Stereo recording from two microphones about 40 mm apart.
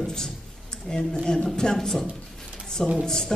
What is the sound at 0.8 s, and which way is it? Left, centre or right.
A woman's voice, centre.